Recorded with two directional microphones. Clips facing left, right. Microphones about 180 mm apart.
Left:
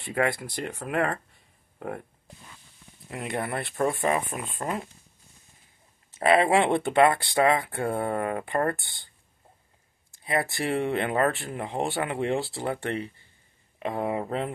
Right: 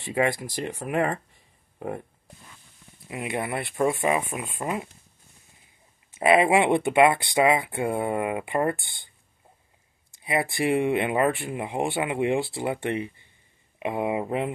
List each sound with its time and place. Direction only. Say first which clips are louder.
0.0 s speech: right 2 dB; 15° right (ahead or behind)
3.1 s speech: right 1 dB; 10° right (ahead or behind)
6.1 s speech: right 1 dB; 10° right (ahead or behind)
10.2 s speech: right 3 dB; 15° right (ahead or behind)